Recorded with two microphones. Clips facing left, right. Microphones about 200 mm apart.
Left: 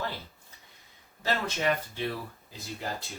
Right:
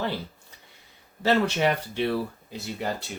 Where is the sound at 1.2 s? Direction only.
70° right (ahead or behind).